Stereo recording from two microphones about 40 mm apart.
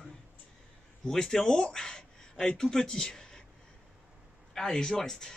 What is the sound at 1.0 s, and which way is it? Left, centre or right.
Speech, centre.